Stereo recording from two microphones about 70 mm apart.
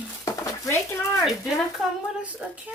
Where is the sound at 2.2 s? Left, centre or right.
Right.